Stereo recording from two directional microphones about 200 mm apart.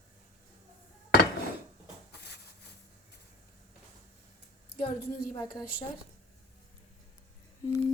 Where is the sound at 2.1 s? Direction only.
55° left (ahead or behind).